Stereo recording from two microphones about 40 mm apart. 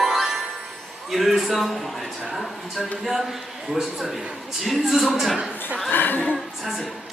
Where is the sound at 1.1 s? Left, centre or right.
Centre.